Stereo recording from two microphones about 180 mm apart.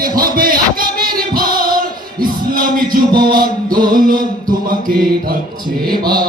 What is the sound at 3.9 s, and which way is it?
Music, 50° right (ahead or behind).